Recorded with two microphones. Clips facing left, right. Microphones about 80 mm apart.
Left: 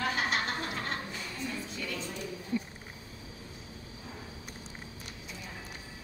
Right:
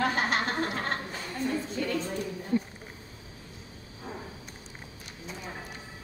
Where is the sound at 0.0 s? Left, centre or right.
Right.